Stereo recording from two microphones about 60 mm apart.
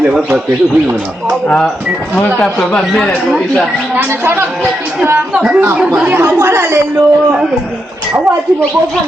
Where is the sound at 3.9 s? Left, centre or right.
Right.